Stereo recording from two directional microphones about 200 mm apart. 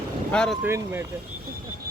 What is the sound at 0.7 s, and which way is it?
Speech, 10° right (ahead or behind).